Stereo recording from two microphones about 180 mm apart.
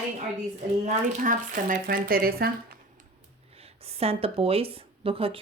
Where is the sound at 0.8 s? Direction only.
45° right (ahead or behind).